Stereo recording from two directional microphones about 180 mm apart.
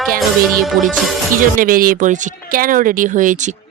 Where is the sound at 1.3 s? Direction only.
50° right (ahead or behind).